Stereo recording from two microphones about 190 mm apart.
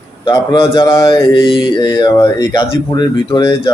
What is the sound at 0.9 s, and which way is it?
Speech, 15° left (ahead or behind).